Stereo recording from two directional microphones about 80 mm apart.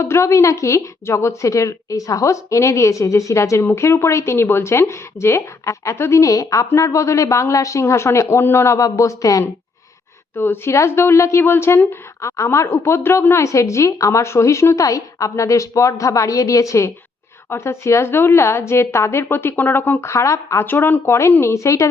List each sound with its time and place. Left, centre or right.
0.0 s a woman's voice: left
10.3 s a woman's voice: left
20.7 s a woman's voice: left